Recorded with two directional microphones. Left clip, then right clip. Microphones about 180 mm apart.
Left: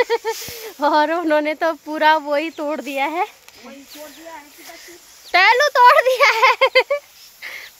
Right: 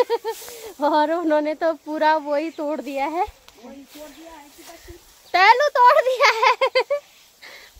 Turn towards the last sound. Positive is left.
turn(degrees=25)  # may be behind; listen again after turning